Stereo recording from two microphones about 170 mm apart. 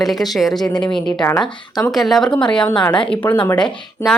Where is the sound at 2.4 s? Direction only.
25° left (ahead or behind).